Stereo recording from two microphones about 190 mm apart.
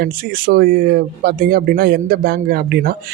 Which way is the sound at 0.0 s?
50° right (ahead or behind).